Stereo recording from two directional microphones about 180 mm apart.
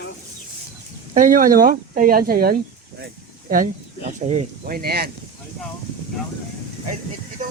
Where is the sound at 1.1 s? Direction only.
45° right (ahead or behind).